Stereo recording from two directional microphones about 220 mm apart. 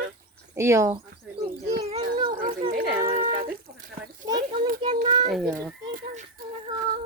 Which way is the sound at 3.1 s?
40° right (ahead or behind).